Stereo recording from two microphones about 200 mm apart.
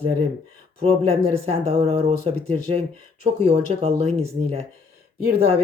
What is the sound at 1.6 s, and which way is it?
Speech, 30° right (ahead or behind).